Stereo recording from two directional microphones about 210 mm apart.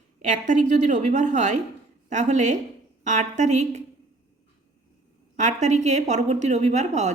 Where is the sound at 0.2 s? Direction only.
35° right (ahead or behind).